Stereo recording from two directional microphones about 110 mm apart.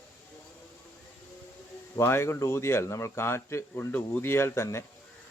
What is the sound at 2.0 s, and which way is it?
Speech, 25° left (ahead or behind).